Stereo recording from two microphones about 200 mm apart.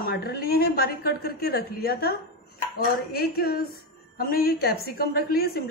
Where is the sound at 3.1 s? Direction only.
50° left (ahead or behind).